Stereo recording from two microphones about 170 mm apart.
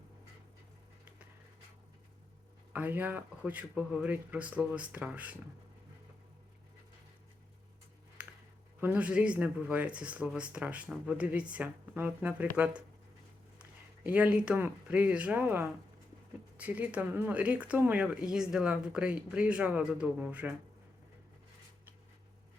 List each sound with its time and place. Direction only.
2.7 s speech: 10° right (ahead or behind)
8.2 s a sound: 10° right (ahead or behind)
8.8 s speech: 10° right (ahead or behind)